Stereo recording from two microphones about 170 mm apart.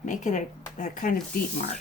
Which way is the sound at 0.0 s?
45° left (ahead or behind).